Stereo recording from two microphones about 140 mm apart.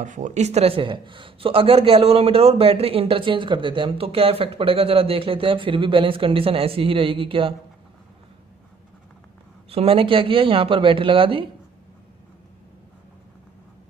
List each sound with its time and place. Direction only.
0.0 s speech: 65° right (ahead or behind); by 7.5 s 40° right (ahead or behind)
9.7 s speech: 40° right (ahead or behind)